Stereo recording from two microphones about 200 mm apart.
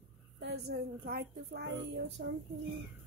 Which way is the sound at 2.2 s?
60° right (ahead or behind).